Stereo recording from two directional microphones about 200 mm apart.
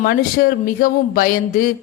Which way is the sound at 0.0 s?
45° left (ahead or behind).